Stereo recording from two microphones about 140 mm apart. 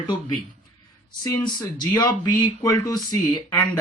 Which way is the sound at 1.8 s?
25° left (ahead or behind).